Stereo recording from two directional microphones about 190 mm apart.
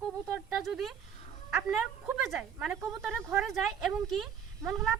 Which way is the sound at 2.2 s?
5° right (ahead or behind).